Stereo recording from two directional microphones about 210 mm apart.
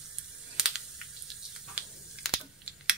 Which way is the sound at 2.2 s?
Centre (ahead or behind).